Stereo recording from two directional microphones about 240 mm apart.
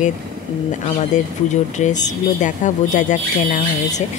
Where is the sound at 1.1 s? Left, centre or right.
Left.